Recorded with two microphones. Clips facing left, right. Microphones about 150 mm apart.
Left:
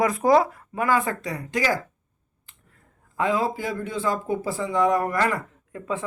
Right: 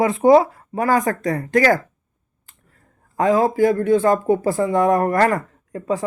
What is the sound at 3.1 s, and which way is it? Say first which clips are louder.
Speech: right 7 dB; 40° right (ahead or behind).